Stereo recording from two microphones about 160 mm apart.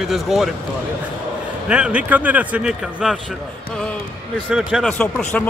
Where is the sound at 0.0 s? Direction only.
Centre (ahead or behind).